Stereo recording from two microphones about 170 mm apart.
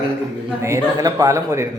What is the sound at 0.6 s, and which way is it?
Speech, 20° right (ahead or behind).